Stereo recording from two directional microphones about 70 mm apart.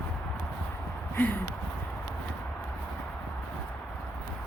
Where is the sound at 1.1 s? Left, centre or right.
Left.